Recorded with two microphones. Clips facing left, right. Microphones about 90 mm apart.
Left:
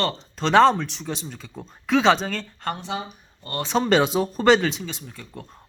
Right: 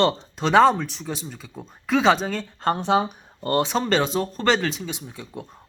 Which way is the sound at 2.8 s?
60° right (ahead or behind).